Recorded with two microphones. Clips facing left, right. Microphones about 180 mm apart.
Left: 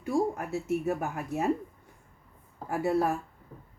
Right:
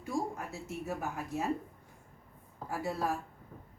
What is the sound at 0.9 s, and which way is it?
Speech, 60° left (ahead or behind).